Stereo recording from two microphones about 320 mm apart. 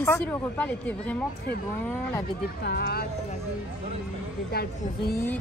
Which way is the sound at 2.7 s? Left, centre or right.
Left.